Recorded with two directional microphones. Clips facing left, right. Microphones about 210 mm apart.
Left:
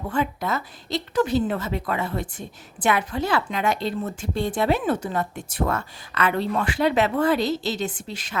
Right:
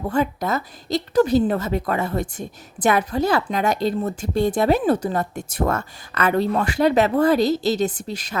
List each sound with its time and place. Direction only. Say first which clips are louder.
0.1 s a woman's voice: right 3 dB; 40° right (ahead or behind)